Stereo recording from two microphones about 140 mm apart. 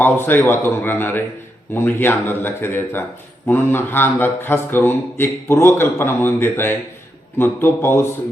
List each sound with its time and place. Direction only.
0.0 s speech: 15° left (ahead or behind)